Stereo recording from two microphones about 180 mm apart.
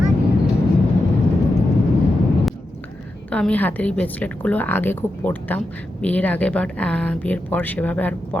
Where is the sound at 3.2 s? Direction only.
5° left (ahead or behind).